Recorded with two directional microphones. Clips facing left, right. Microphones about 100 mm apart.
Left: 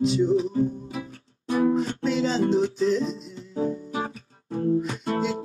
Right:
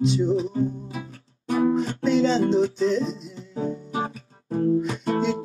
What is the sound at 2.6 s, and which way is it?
Music, 35° right (ahead or behind).